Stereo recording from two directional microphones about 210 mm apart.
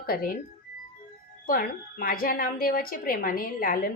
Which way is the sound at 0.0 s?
45° left (ahead or behind).